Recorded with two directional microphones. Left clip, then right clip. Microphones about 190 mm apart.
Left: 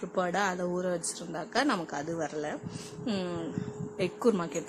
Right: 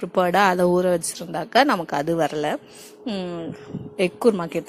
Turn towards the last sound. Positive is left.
turn(degrees=-30)  # may be behind; listen again after turning